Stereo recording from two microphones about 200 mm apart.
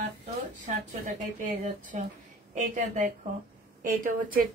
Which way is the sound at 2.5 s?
40° right (ahead or behind).